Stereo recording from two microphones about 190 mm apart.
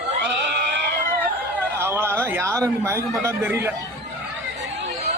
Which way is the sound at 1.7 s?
15° right (ahead or behind).